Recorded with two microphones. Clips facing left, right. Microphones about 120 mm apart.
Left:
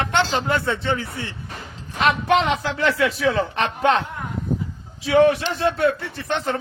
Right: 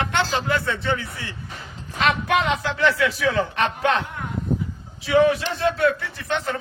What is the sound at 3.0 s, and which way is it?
Speech, 30° left (ahead or behind).